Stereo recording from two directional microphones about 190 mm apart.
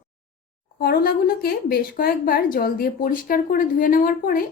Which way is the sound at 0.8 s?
50° left (ahead or behind).